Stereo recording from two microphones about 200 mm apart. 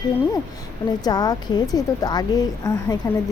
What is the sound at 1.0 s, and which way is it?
A woman's voice, 20° left (ahead or behind).